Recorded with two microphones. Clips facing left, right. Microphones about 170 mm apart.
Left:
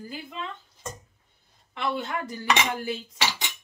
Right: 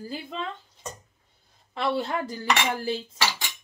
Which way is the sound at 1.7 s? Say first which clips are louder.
Right 3 dB; 30° right (ahead or behind).